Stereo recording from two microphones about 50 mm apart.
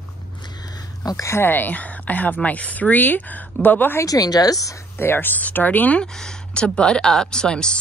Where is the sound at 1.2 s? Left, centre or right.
Left.